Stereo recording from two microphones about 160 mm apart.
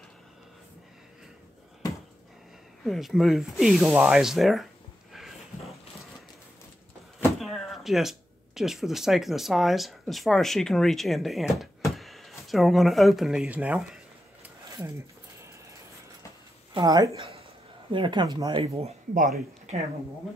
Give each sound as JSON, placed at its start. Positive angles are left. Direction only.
{"t": 2.8, "sound": "speech", "side_deg": 0}
{"t": 5.1, "sound": "a sound", "side_deg": 0}
{"t": 7.3, "sound": "speech", "side_deg": 0}
{"t": 16.7, "sound": "speech", "side_deg": -25}
{"t": 17.2, "sound": "a sound", "side_deg": -35}
{"t": 17.9, "sound": "speech", "side_deg": -30}
{"t": 19.1, "sound": "speech", "side_deg": -60}